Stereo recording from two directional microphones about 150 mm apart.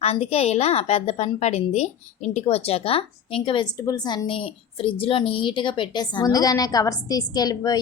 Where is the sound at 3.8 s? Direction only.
25° left (ahead or behind).